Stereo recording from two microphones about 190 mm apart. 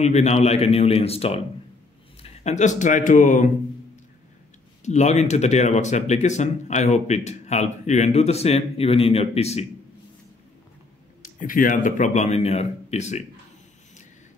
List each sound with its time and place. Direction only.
0.0 s speech: 35° left (ahead or behind)
4.8 s speech: 35° left (ahead or behind)
11.3 s speech: 45° left (ahead or behind)